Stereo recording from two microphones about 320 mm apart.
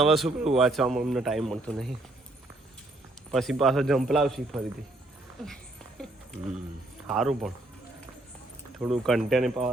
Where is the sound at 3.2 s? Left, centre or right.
Centre.